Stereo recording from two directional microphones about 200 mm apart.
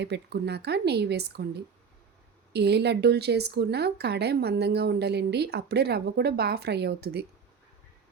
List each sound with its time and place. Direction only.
0.0 s speech: 55° right (ahead or behind)